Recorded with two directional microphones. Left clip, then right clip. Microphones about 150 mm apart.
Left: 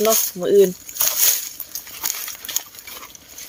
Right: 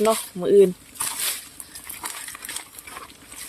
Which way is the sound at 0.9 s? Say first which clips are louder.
Left 8 dB; 70° left (ahead or behind).